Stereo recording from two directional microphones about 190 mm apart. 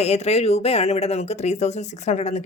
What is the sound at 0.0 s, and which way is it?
Speech, 35° left (ahead or behind).